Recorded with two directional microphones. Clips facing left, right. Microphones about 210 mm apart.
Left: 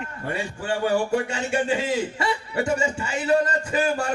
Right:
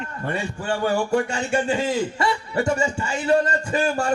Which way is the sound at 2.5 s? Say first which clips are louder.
Right 1 dB; 40° right (ahead or behind).